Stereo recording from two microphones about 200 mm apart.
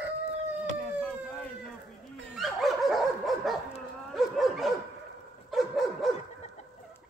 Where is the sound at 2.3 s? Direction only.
Centre (ahead or behind).